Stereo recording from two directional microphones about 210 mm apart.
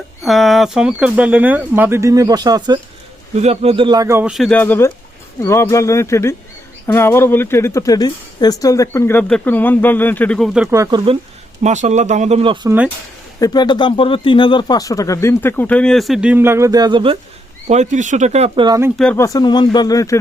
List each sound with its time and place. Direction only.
0.2 s speech: centre (ahead or behind)
10.8 s speech: 25° right (ahead or behind)
11.6 s speech: 35° right (ahead or behind)
12.6 s speech: 5° right (ahead or behind)
13.4 s speech: 20° left (ahead or behind); by 17.2 s 25° right (ahead or behind)
17.7 s speech: 35° right (ahead or behind)
18.9 s speech: 10° left (ahead or behind)